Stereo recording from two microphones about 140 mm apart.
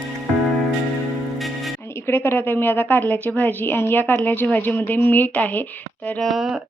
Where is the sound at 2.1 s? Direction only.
15° left (ahead or behind).